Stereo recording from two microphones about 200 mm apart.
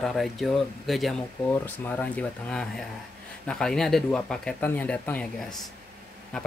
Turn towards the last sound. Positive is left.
turn(degrees=5)  # may be behind; listen again after turning